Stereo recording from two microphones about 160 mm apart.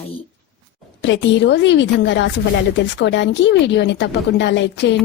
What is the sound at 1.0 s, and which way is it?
Speech, 90° left.